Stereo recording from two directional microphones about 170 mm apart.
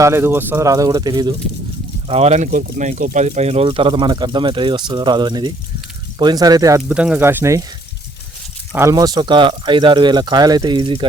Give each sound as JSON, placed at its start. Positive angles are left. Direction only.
{"t": 0.0, "sound": "speech", "side_deg": -15}
{"t": 2.0, "sound": "speech", "side_deg": -40}
{"t": 6.9, "sound": "speech", "side_deg": -5}
{"t": 8.7, "sound": "speech", "side_deg": -15}